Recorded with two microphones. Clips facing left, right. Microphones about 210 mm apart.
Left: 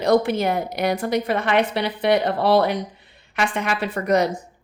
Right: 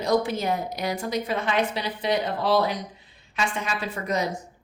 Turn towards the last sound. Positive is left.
turn(degrees=65)  # may be behind; listen again after turning